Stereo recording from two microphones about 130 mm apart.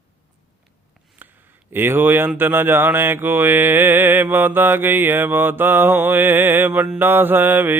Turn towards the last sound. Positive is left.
turn(degrees=-15)  # may be behind; listen again after turning